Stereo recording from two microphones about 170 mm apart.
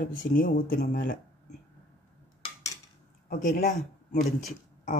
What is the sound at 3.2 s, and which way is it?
Speech, 50° left (ahead or behind).